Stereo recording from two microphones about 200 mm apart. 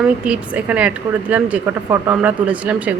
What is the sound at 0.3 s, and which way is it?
A woman's voice, 5° right (ahead or behind).